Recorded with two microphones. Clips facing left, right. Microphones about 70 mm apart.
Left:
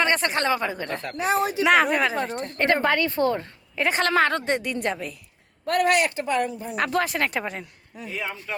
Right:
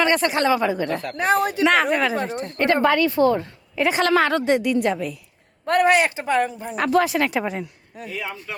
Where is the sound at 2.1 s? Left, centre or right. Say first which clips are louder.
Right 2 dB; left.